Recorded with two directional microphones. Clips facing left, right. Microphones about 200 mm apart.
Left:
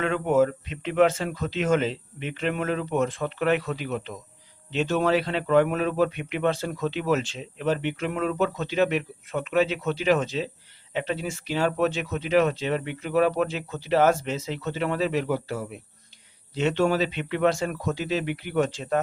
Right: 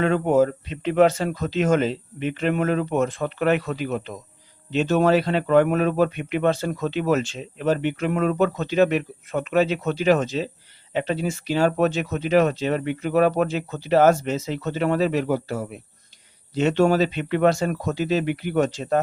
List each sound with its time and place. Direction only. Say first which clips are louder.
0.0 s speech: right 3 dB; 35° right (ahead or behind)